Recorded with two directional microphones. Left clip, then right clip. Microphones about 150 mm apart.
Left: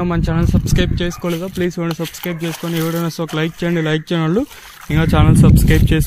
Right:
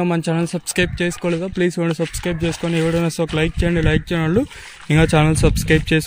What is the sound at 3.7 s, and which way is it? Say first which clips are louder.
Speech: left 1 dB; 15° right (ahead or behind).